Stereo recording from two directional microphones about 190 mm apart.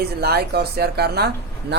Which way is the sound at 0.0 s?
55° right (ahead or behind).